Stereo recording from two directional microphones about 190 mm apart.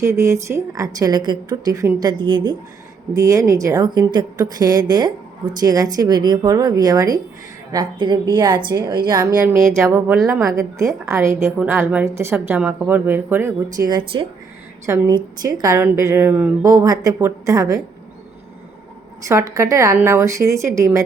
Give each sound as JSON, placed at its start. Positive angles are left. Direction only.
{"t": 0.0, "sound": "a woman's voice", "side_deg": -15}
{"t": 9.4, "sound": "music", "side_deg": -5}
{"t": 9.7, "sound": "a woman's voice", "side_deg": -15}
{"t": 10.2, "sound": "music", "side_deg": 0}
{"t": 10.4, "sound": "a woman's voice", "side_deg": -15}
{"t": 19.3, "sound": "a woman's voice", "side_deg": -15}